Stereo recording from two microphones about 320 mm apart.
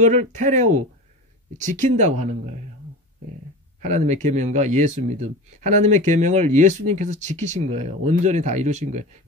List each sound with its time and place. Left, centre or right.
0.0 s speech: right
3.8 s speech: right